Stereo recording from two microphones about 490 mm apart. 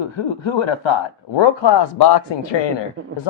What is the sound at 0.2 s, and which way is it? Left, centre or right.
Speech, left.